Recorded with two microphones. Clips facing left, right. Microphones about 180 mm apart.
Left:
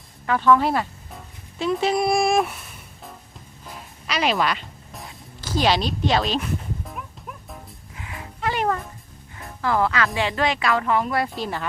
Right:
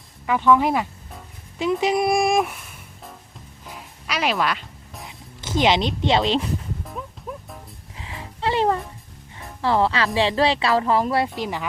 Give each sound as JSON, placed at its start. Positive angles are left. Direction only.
{"t": 0.3, "sound": "speech", "side_deg": -15}
{"t": 3.7, "sound": "music", "side_deg": -5}
{"t": 5.0, "sound": "speech", "side_deg": -20}
{"t": 7.3, "sound": "music", "side_deg": -35}
{"t": 9.6, "sound": "speech", "side_deg": -30}
{"t": 11.3, "sound": "speech", "side_deg": -15}